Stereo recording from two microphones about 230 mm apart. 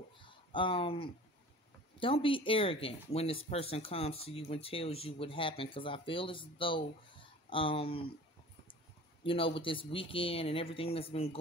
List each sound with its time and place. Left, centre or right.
0.2 s a sound: left
2.0 s speech: left
9.2 s speech: left